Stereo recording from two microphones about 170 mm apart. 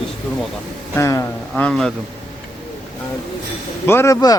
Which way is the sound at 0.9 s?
15° left (ahead or behind).